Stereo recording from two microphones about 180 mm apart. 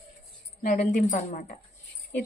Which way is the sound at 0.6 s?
45° left (ahead or behind).